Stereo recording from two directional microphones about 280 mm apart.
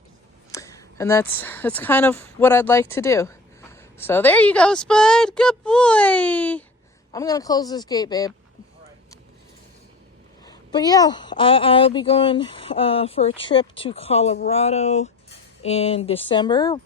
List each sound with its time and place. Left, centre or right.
0.5 s a woman's voice: centre
10.4 s a woman's voice: centre